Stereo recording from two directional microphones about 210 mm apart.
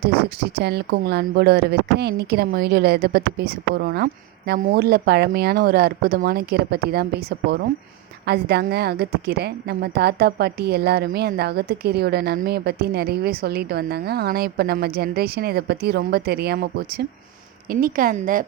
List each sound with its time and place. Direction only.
0.0 s a woman's voice: 50° right (ahead or behind)